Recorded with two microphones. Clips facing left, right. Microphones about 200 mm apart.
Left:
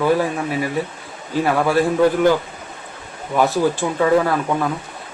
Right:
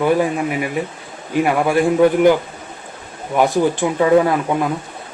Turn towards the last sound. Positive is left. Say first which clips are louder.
# right 3 dB
turn(degrees=-20)  # may be behind; listen again after turning